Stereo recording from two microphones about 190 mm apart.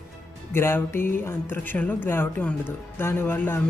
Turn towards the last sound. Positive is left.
turn(degrees=10)  # may be behind; listen again after turning